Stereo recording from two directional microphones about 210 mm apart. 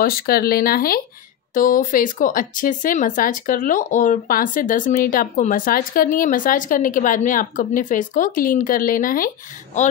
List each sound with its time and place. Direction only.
0.0 s speech: 45° left (ahead or behind)